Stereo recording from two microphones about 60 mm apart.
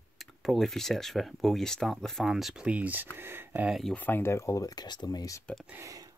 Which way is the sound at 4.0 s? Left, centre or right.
Left.